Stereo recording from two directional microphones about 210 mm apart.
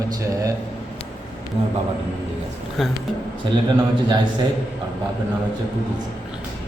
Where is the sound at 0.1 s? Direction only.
15° right (ahead or behind).